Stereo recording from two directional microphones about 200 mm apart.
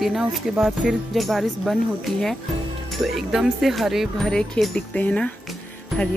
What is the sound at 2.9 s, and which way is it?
Speech, centre (ahead or behind).